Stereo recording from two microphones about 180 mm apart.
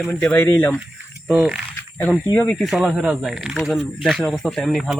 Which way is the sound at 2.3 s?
5° left (ahead or behind).